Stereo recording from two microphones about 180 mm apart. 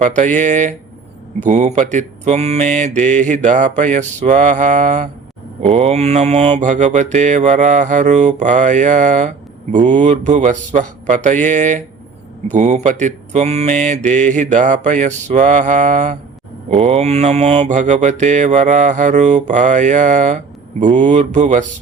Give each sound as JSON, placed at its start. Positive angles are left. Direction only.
{"t": 0.0, "sound": "mantra", "side_deg": -40}